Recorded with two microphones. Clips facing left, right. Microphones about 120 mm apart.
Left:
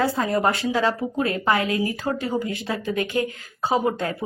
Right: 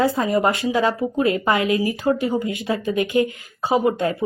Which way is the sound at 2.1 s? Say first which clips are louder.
Right 10 dB; 10° right (ahead or behind).